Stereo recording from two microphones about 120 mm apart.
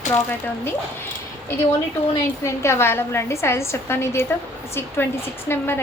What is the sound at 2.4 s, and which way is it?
A woman's voice, 20° left (ahead or behind).